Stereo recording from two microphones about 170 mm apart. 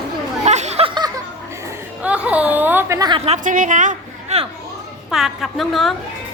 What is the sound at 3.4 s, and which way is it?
Speech, 50° right (ahead or behind).